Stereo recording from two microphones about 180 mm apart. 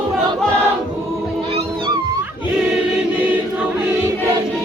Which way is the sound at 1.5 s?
25° right (ahead or behind).